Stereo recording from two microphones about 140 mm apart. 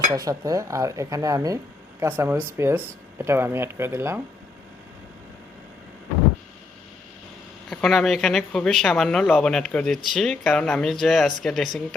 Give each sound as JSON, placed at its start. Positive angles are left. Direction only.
{"t": 0.1, "sound": "speech", "side_deg": -25}
{"t": 7.7, "sound": "speech", "side_deg": 5}